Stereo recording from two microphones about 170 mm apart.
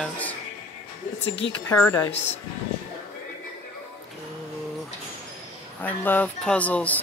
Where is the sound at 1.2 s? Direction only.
90° left.